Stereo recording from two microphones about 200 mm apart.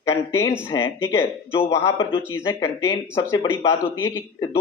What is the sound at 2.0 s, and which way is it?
Speech, 25° left (ahead or behind).